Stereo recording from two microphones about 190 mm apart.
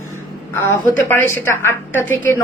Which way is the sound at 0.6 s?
10° left (ahead or behind).